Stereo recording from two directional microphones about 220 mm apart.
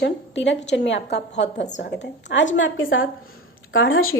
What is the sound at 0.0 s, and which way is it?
A woman's voice, 55° left (ahead or behind).